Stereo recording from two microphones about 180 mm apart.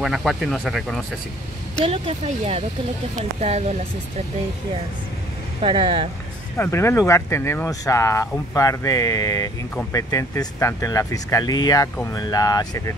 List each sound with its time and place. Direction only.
0.0 s speech: centre (ahead or behind)
1.8 s speech: 35° right (ahead or behind)
5.6 s speech: 30° right (ahead or behind)
6.5 s speech: 10° left (ahead or behind)